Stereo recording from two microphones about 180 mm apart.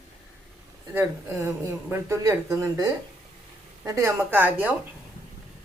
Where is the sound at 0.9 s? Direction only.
15° right (ahead or behind).